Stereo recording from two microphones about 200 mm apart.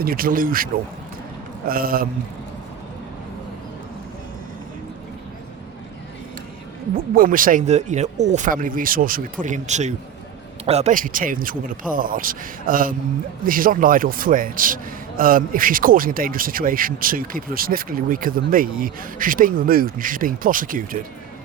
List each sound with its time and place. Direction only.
0.0 s a man's voice: 45° right (ahead or behind)
6.9 s a man's voice: 45° right (ahead or behind)